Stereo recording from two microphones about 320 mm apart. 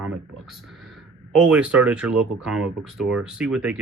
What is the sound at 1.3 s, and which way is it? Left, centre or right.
Speech, centre.